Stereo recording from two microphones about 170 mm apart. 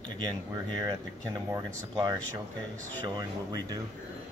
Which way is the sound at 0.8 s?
20° right (ahead or behind).